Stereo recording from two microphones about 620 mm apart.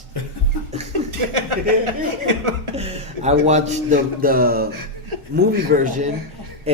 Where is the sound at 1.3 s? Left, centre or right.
Right.